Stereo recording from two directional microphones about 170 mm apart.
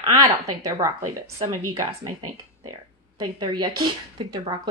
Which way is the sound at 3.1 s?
25° right (ahead or behind).